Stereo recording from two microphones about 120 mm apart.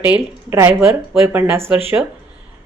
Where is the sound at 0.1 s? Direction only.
15° right (ahead or behind).